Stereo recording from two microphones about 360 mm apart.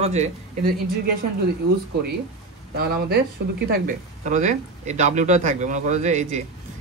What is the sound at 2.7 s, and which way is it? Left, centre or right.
Speech, right.